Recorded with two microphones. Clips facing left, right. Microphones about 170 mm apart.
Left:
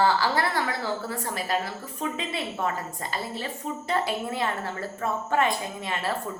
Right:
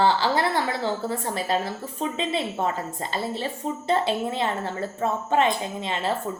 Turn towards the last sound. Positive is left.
turn(degrees=-25)  # may be behind; listen again after turning